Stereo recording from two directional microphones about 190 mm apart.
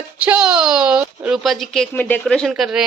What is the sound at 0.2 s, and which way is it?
A woman's voice, 5° right (ahead or behind).